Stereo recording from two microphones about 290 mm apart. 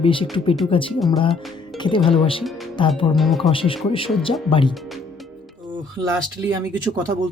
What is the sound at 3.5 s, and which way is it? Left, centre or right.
Speech, centre.